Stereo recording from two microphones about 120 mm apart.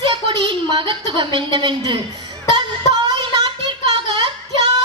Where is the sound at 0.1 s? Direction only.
45° right (ahead or behind).